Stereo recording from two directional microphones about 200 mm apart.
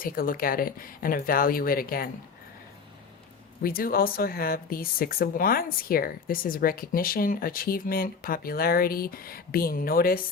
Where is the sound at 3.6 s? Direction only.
45° left (ahead or behind).